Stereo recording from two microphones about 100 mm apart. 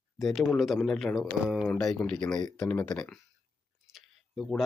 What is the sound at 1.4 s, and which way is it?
Speech, 10° right (ahead or behind).